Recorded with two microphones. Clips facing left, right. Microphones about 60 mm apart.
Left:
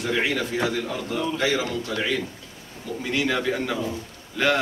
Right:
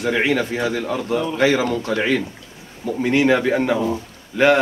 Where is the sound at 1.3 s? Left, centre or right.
Right.